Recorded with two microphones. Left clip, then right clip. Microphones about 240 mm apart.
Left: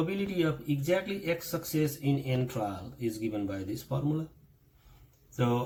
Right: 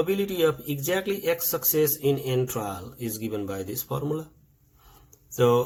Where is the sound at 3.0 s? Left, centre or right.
Right.